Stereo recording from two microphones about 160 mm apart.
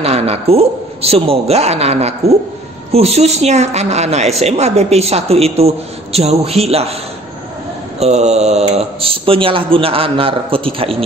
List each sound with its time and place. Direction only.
0.0 s speech: 40° right (ahead or behind)
8.0 s speech: 45° right (ahead or behind)